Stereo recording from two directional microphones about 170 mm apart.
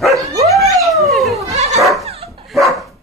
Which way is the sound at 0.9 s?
Centre (ahead or behind).